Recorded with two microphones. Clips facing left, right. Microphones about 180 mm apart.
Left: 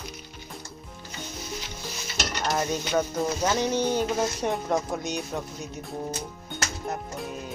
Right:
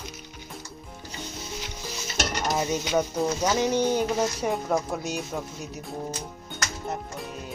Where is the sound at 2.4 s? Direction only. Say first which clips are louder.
Left 1 dB; 5° right (ahead or behind).